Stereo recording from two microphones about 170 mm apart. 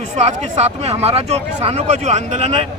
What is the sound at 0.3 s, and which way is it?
Speech, 40° right (ahead or behind).